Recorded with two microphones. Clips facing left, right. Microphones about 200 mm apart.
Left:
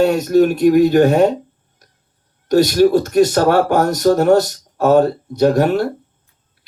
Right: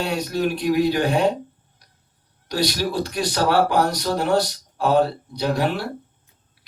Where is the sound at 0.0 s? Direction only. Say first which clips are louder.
Left 11 dB; 45° left (ahead or behind).